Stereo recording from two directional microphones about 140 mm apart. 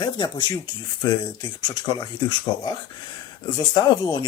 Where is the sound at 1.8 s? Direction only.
30° left (ahead or behind).